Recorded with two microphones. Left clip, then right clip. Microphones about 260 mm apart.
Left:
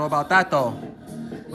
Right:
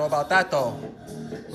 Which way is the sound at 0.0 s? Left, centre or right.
Centre.